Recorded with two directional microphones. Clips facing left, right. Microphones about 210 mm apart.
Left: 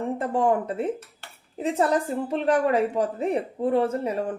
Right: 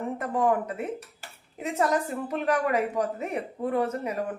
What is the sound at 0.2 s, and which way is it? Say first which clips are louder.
A woman's voice: left 2 dB; 30° left (ahead or behind).